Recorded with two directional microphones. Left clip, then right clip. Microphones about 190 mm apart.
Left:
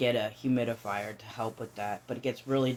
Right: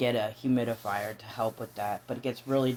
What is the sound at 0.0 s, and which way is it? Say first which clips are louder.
Speech: even; 30° right (ahead or behind).